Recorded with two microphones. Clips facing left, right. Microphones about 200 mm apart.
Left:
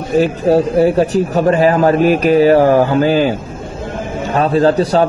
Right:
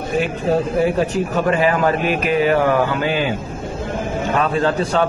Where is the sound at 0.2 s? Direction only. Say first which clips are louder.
Left 7 dB; 35° left (ahead or behind).